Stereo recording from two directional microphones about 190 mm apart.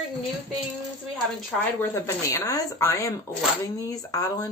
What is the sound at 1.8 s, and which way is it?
Speech, 15° left (ahead or behind).